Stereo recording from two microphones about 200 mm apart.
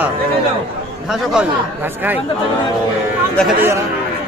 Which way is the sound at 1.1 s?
Centre (ahead or behind).